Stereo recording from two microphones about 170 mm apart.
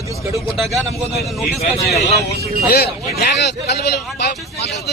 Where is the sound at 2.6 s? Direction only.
65° left (ahead or behind).